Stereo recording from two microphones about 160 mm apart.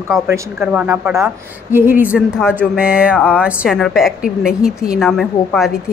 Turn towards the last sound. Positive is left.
turn(degrees=0)  # may be behind; listen again after turning